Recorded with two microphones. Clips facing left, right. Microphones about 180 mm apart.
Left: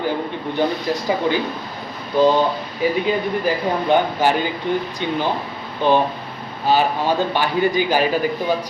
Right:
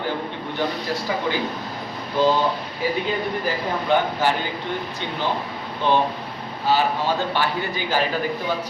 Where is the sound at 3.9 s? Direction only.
20° left (ahead or behind).